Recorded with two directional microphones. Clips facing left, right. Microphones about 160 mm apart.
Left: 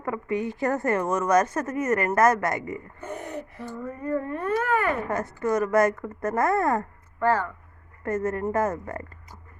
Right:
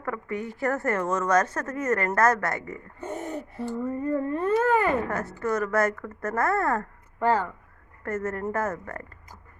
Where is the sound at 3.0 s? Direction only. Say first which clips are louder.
Right 5 dB; 25° right (ahead or behind).